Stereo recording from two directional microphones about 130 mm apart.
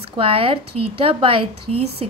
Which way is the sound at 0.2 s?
45° right (ahead or behind).